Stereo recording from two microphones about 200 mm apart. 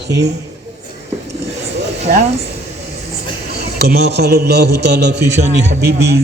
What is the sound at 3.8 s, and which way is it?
A man's voice, 55° right (ahead or behind).